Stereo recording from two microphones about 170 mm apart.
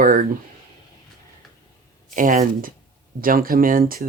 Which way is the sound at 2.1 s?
50° right (ahead or behind).